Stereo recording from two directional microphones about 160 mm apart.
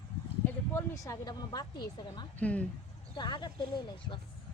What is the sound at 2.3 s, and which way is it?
Speech, 10° left (ahead or behind).